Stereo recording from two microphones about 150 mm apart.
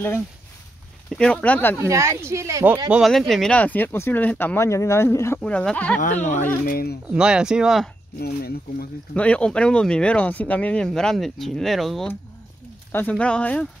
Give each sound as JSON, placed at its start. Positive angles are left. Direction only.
{"t": 1.1, "sound": "speech", "side_deg": 5}
{"t": 1.8, "sound": "speech", "side_deg": -20}
{"t": 2.9, "sound": "speech", "side_deg": 0}
{"t": 5.4, "sound": "speech", "side_deg": 5}
{"t": 6.6, "sound": "speech", "side_deg": 80}
{"t": 7.1, "sound": "speech", "side_deg": -5}
{"t": 8.2, "sound": "speech", "side_deg": 90}
{"t": 9.1, "sound": "speech", "side_deg": 10}